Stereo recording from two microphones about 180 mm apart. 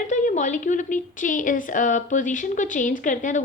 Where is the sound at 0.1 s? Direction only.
45° left (ahead or behind).